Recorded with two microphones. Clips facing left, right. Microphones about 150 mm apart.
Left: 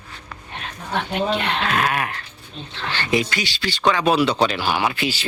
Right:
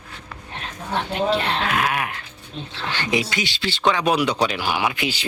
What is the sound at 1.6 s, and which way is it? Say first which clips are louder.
Dog: left 1 dB; 10° right (ahead or behind).